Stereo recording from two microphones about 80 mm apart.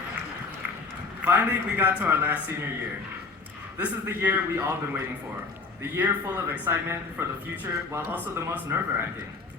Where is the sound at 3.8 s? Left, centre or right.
Right.